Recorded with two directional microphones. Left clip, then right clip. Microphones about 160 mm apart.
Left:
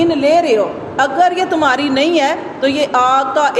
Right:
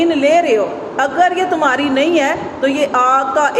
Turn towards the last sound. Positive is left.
turn(degrees=35)  # may be behind; listen again after turning